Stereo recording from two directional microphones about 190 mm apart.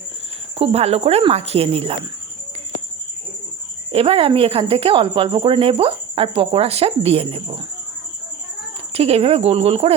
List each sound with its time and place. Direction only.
0.5 s speech: 30° right (ahead or behind)
3.9 s speech: 30° right (ahead or behind)
8.9 s speech: 30° right (ahead or behind)